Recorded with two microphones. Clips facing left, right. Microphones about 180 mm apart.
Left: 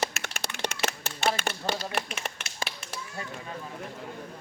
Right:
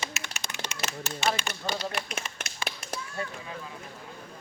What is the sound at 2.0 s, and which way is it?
Tap, 70° left (ahead or behind).